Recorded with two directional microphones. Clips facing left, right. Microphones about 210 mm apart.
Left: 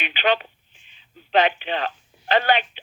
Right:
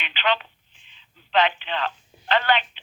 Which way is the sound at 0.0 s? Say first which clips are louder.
Left 3 dB; 45° left (ahead or behind).